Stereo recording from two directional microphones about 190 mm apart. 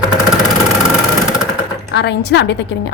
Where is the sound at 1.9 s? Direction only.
65° left (ahead or behind).